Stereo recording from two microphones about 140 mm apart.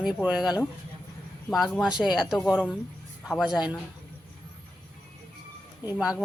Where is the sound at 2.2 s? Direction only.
Centre (ahead or behind).